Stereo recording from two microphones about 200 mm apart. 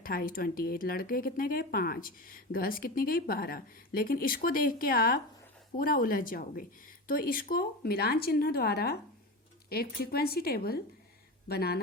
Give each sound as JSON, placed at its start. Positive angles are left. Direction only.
{"t": 0.0, "sound": "speech", "side_deg": 45}